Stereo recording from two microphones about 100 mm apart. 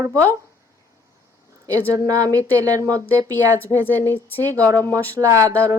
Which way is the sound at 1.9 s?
35° right (ahead or behind).